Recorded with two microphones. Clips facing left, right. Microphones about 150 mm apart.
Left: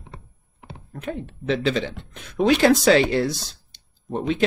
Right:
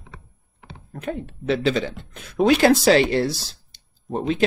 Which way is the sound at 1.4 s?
40° right (ahead or behind).